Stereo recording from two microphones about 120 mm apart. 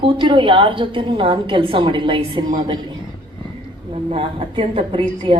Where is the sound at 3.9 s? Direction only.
50° right (ahead or behind).